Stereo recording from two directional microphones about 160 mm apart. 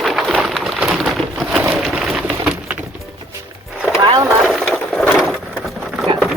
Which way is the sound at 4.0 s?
30° right (ahead or behind).